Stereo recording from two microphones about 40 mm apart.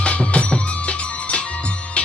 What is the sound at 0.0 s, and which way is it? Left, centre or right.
Music, left.